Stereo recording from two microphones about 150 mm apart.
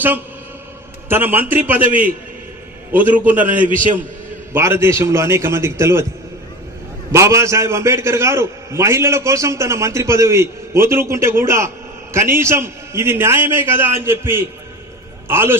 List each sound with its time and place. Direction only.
1.0 s a man's voice: 15° right (ahead or behind)
2.9 s a man's voice: 10° right (ahead or behind)
4.5 s a man's voice: 15° right (ahead or behind)
7.1 s a man's voice: 20° right (ahead or behind)